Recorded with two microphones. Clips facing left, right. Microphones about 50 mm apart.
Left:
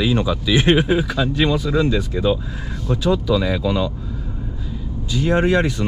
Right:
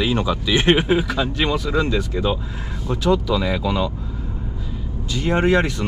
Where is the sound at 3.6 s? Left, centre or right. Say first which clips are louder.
Left 1 dB; right.